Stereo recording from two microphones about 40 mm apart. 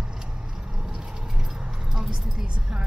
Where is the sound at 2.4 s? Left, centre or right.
Centre.